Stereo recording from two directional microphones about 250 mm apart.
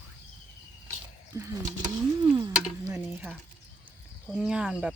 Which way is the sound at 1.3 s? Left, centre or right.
Centre.